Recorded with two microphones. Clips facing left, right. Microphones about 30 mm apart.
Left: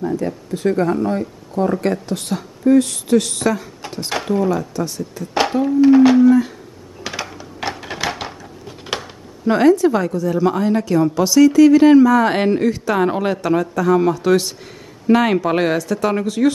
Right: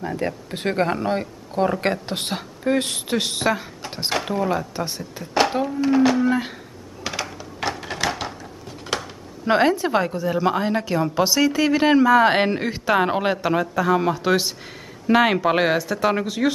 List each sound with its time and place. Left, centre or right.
0.0 s speech: right
4.1 s speech: centre
4.7 s speech: right
5.7 s speech: centre
6.2 s speech: right
7.0 s a sound: centre
9.5 s a woman's voice: right; by 16.5 s centre